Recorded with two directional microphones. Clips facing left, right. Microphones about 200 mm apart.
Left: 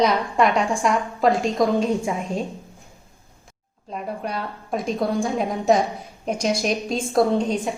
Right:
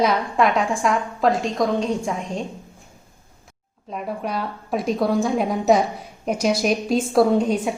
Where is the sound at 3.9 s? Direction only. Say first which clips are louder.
Right 2 dB; centre (ahead or behind).